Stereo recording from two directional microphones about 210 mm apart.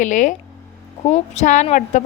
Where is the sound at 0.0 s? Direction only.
35° left (ahead or behind).